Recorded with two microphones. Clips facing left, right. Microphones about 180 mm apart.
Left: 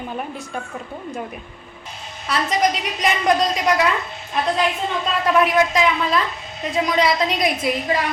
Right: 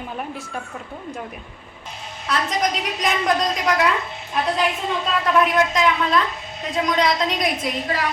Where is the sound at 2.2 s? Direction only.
Centre (ahead or behind).